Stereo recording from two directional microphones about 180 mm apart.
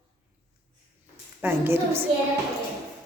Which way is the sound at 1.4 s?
15° right (ahead or behind).